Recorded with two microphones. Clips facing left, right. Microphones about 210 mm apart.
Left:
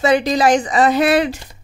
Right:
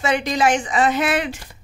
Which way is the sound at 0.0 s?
35° left (ahead or behind).